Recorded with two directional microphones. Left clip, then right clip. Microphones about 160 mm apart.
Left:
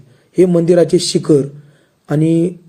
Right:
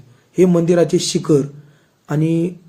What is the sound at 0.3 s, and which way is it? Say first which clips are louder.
A man's voice: left 3 dB; 20° left (ahead or behind).